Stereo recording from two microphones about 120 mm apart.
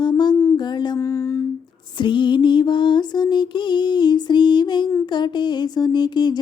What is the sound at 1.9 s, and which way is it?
Mantra, 40° left (ahead or behind).